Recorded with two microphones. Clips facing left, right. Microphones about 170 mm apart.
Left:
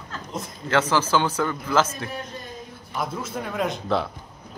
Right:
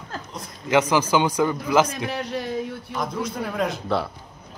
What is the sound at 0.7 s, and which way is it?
A man's voice, 15° right (ahead or behind).